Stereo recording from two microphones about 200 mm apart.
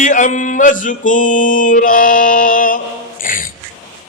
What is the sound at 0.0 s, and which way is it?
Mantra, 40° left (ahead or behind).